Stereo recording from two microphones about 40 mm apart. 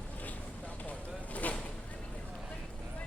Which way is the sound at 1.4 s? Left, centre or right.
Left.